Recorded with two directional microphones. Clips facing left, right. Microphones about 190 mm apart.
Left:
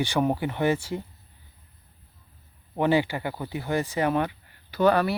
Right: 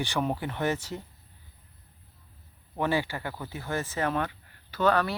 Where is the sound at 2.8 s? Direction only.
15° left (ahead or behind).